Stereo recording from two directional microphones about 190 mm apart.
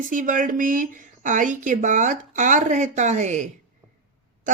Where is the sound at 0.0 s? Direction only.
45° right (ahead or behind).